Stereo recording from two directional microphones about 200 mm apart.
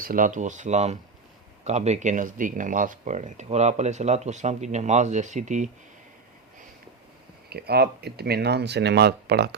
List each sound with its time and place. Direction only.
0.0 s speech: 45° right (ahead or behind)
7.5 s speech: 55° right (ahead or behind)